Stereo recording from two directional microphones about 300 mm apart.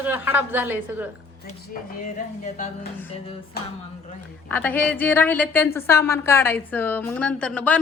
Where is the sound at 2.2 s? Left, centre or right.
Left.